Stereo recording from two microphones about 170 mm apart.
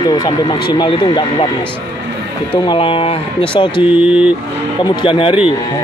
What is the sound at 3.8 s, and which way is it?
Speech, 5° right (ahead or behind).